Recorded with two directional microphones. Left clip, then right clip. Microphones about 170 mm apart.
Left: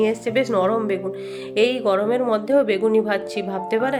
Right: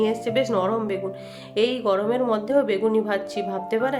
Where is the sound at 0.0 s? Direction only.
15° left (ahead or behind).